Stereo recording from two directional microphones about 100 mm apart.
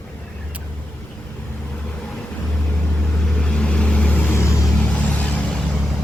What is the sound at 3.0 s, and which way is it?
Vehicle, 10° left (ahead or behind).